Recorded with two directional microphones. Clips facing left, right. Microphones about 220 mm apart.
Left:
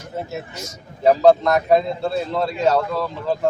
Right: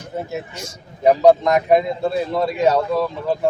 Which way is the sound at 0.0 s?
15° right (ahead or behind).